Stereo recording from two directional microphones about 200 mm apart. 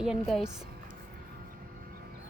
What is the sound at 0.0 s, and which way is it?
Speech, centre (ahead or behind).